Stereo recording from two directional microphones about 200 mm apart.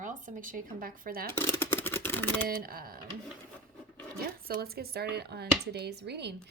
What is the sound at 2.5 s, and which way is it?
Speech, 45° right (ahead or behind).